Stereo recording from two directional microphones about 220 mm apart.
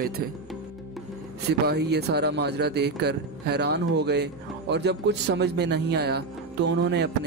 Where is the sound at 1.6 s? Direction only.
45° right (ahead or behind).